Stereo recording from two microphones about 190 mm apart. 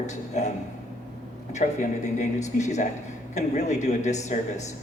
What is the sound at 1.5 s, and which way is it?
Speech, 40° left (ahead or behind).